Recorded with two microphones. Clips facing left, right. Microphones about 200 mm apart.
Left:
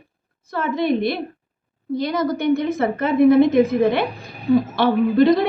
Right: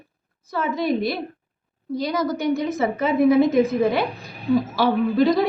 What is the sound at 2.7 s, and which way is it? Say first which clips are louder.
A woman's voice: left 2 dB; centre (ahead or behind).